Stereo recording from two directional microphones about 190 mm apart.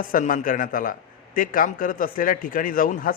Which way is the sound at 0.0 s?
45° left (ahead or behind).